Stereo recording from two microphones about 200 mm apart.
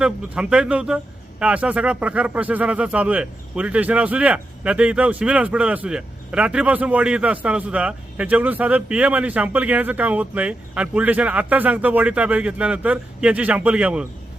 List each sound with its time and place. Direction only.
0.0 s a man's voice: 5° right (ahead or behind)